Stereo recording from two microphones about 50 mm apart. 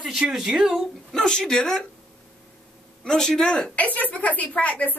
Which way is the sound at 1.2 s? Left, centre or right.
Centre.